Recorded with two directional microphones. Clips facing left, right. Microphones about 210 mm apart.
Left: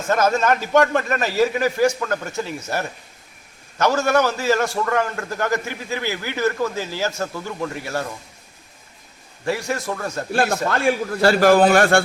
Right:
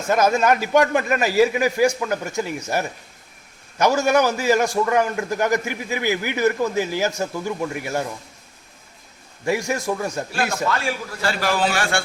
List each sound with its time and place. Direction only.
0.1 s a man's voice: 10° right (ahead or behind)
9.4 s a man's voice: 15° right (ahead or behind)
10.7 s a man's voice: 45° left (ahead or behind)